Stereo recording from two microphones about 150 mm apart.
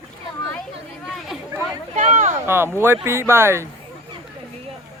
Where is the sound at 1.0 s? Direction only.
Centre (ahead or behind).